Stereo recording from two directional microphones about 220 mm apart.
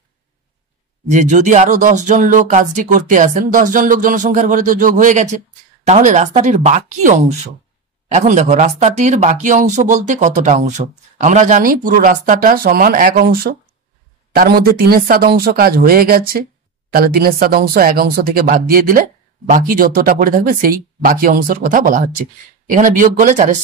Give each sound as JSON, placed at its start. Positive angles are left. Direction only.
{"t": 1.1, "sound": "speech", "side_deg": -35}